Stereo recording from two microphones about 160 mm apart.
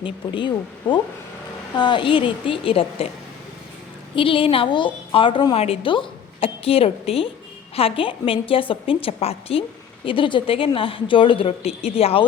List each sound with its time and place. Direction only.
0.0 s a woman's voice: 30° left (ahead or behind)
4.1 s a woman's voice: 35° left (ahead or behind)